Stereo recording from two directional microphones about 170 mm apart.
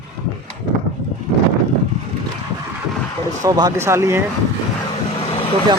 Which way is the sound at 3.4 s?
20° right (ahead or behind).